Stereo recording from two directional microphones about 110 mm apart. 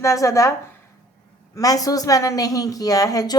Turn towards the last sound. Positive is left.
turn(degrees=35)  # may be behind; listen again after turning